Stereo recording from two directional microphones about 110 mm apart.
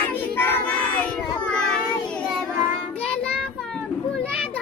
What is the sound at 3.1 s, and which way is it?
Child singing, 10° left (ahead or behind).